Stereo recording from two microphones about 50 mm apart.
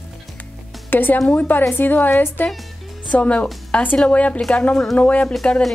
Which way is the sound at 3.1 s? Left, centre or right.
Left.